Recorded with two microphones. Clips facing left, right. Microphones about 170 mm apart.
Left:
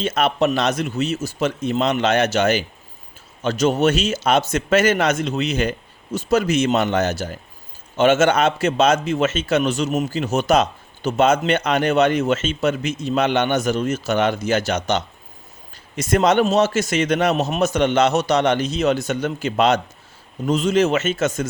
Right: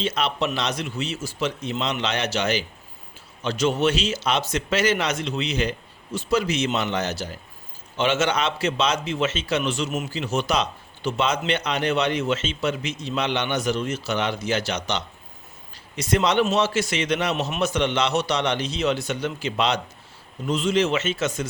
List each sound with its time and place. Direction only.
0.0 s a man's voice: 50° left (ahead or behind)